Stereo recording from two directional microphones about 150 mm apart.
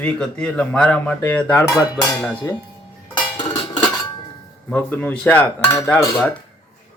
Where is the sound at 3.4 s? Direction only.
30° left (ahead or behind).